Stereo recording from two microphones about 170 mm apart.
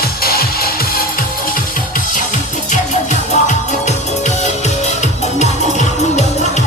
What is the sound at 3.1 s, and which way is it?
Music, 45° left (ahead or behind).